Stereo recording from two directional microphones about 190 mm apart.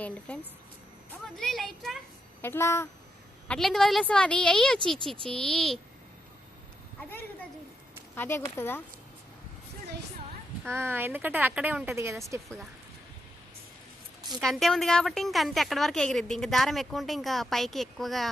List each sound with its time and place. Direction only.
0.3 s a woman's voice: 5° left (ahead or behind)
2.4 s speech: 15° left (ahead or behind)
3.5 s a woman's voice: centre (ahead or behind)
8.1 s speech: 10° left (ahead or behind)
10.6 s speech: 10° right (ahead or behind)
14.4 s a woman's voice: centre (ahead or behind)